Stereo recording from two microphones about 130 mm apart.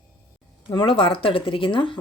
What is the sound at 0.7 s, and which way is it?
Speech, 40° left (ahead or behind).